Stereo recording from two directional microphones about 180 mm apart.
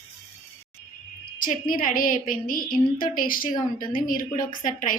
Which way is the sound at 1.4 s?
50° left (ahead or behind).